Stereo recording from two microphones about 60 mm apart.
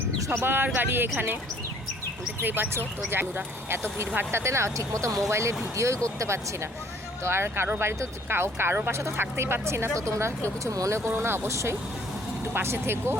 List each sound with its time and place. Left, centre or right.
0.3 s speech: right
2.4 s speech: right
10.6 s speech: right
12.5 s speech: right